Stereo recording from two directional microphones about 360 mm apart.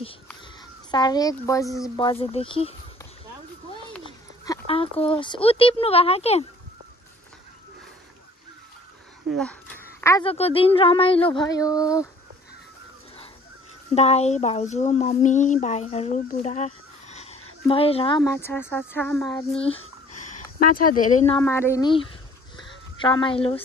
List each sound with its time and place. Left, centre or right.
0.9 s speech: centre
4.5 s speech: centre
9.3 s speech: centre
13.9 s speech: centre
21.4 s speech: centre